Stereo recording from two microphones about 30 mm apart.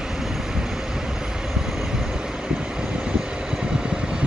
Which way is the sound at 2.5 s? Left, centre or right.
Right.